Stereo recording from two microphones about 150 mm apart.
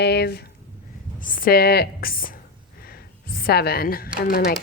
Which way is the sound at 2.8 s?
90° left.